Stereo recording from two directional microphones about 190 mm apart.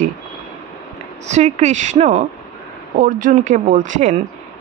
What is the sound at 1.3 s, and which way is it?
A woman's voice, 40° right (ahead or behind).